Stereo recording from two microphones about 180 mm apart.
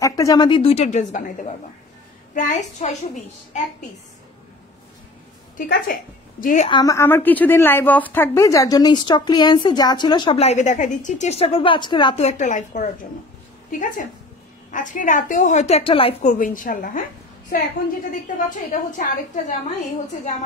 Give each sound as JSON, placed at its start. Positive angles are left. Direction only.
{"t": 0.0, "sound": "a woman's voice", "side_deg": 20}
{"t": 5.7, "sound": "a woman's voice", "side_deg": 60}
{"t": 6.4, "sound": "a woman's voice", "side_deg": 45}
{"t": 6.7, "sound": "a woman's voice", "side_deg": 20}
{"t": 12.2, "sound": "a woman's voice", "side_deg": 40}
{"t": 18.7, "sound": "a woman's voice", "side_deg": 45}